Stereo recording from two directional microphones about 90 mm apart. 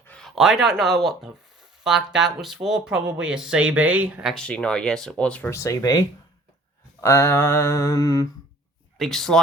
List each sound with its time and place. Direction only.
0.3 s speech: 5° right (ahead or behind)
4.4 s speech: 10° left (ahead or behind)
5.5 s mantra: 35° left (ahead or behind)
9.0 s speech: 5° left (ahead or behind)